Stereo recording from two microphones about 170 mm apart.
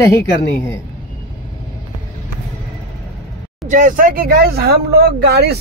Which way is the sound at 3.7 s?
50° right (ahead or behind).